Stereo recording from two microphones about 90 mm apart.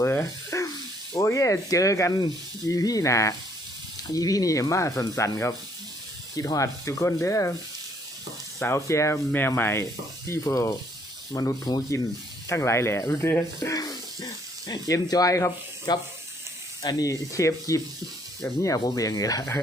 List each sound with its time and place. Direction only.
0.0 s rub: 25° left (ahead or behind)
1.1 s speech: 35° left (ahead or behind)
6.3 s speech: 40° left (ahead or behind)
8.5 s speech: 30° left (ahead or behind)
11.3 s rub: 45° left (ahead or behind)
12.5 s speech: 30° left (ahead or behind)
13.6 s snake: 40° left (ahead or behind)
14.7 s speech: 45° left (ahead or behind)
15.9 s rub: 50° left (ahead or behind)
16.8 s speech: 45° left (ahead or behind)